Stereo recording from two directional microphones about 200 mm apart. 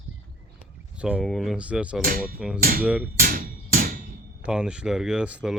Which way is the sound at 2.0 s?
45° right (ahead or behind).